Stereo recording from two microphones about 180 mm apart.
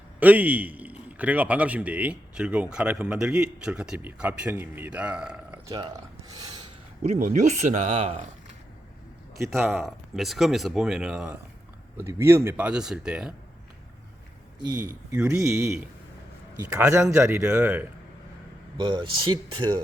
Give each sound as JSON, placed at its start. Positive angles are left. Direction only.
{"t": 0.2, "sound": "a man's voice", "side_deg": -10}
{"t": 5.6, "sound": "speech", "side_deg": -20}
{"t": 7.0, "sound": "speech", "side_deg": -45}
{"t": 9.5, "sound": "speech", "side_deg": 0}
{"t": 11.9, "sound": "a man's voice", "side_deg": -15}
{"t": 14.6, "sound": "a man's voice", "side_deg": -20}
{"t": 18.8, "sound": "speech", "side_deg": -25}